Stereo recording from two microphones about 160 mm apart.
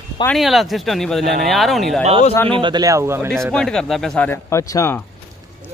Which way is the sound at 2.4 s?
30° right (ahead or behind).